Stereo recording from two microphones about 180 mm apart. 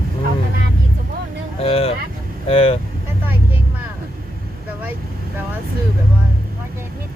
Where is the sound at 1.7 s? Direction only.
35° left (ahead or behind).